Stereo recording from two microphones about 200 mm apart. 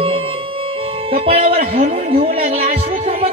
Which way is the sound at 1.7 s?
30° right (ahead or behind).